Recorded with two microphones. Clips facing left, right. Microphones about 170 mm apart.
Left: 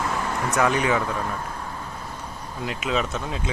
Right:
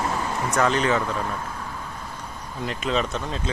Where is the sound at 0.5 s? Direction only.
10° left (ahead or behind).